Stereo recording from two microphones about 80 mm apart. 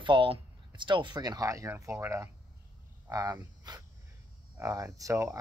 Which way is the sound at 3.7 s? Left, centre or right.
Right.